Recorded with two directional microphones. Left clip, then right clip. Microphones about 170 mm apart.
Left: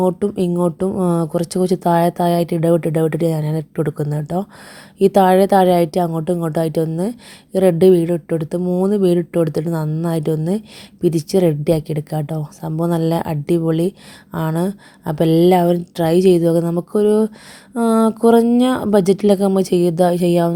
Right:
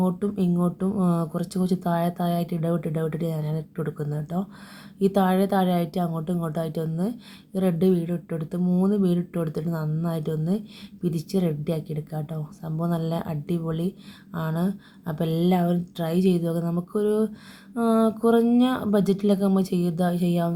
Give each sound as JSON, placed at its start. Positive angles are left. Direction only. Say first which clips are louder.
{"t": 0.0, "sound": "a woman's voice", "louder": "left 9 dB", "side_deg": 40}